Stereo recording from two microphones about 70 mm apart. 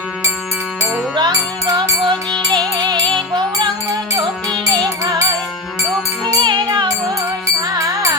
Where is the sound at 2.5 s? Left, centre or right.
Right.